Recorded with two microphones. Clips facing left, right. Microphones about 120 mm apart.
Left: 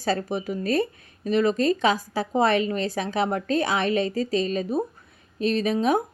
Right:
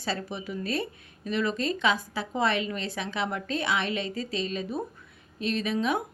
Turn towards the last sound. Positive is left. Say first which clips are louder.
# left 5 dB
turn(degrees=40)  # may be behind; listen again after turning